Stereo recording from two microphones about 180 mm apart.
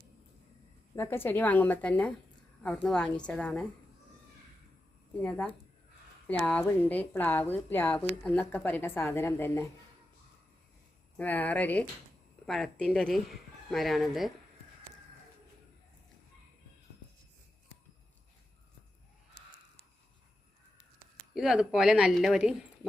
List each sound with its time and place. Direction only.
0.9 s speech: 10° left (ahead or behind)
5.2 s speech: 5° left (ahead or behind)
11.2 s speech: 10° left (ahead or behind)
19.4 s a sound: 70° left (ahead or behind)
21.3 s speech: 5° right (ahead or behind)